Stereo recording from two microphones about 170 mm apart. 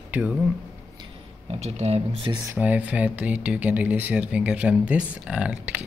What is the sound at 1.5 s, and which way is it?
Speech, 40° right (ahead or behind).